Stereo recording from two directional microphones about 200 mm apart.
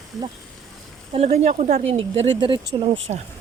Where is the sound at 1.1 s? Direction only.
35° right (ahead or behind).